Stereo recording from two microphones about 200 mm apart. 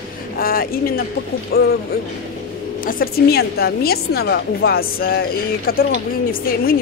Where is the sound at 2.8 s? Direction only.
45° left (ahead or behind).